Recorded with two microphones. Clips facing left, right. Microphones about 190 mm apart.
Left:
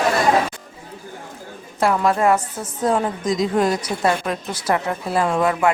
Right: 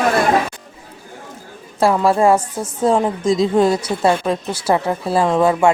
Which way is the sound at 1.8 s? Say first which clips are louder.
Right 4 dB; 30° right (ahead or behind).